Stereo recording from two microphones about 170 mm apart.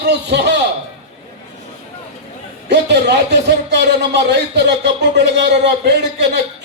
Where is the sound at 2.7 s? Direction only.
85° right.